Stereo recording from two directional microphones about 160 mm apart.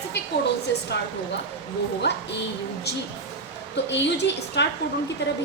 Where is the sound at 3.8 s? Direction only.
90° left.